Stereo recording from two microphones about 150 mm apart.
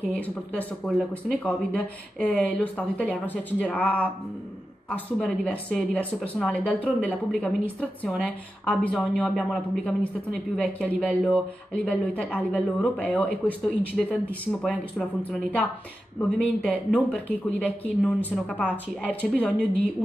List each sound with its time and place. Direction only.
0.1 s speech: 10° left (ahead or behind)